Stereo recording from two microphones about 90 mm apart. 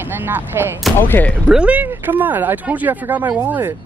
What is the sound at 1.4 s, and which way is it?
Speech, 15° right (ahead or behind).